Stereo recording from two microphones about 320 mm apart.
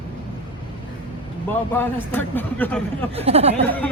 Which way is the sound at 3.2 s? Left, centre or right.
Centre.